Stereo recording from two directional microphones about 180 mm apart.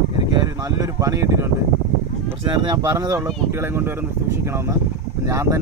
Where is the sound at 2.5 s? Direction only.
25° right (ahead or behind).